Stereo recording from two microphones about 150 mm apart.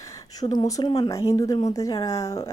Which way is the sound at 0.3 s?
25° left (ahead or behind).